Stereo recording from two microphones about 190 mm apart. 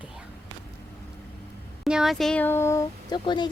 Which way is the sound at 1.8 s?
5° right (ahead or behind).